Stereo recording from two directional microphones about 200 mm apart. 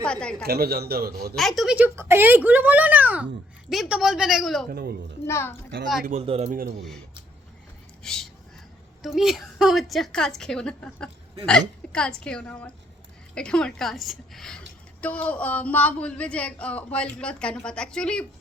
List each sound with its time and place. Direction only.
0.0 s speech: 5° left (ahead or behind)
0.4 s a man's voice: 50° right (ahead or behind)
1.4 s speech: centre (ahead or behind)
4.7 s a man's voice: 50° right (ahead or behind)
5.2 s a child's voice: 10° left (ahead or behind)
6.1 s speech: 30° right (ahead or behind)
8.0 s speech: 5° left (ahead or behind)